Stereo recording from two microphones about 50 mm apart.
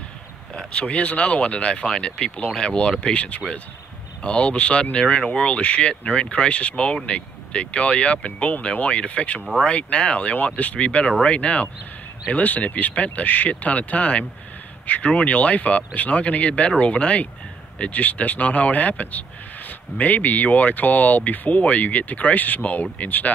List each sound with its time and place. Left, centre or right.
0.6 s speech: left